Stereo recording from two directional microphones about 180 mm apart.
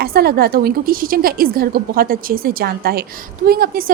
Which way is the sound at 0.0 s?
60° right (ahead or behind).